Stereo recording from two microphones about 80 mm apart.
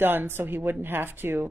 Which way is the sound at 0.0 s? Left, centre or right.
Right.